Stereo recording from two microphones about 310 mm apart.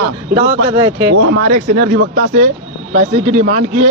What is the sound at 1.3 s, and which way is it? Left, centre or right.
A man's voice, right.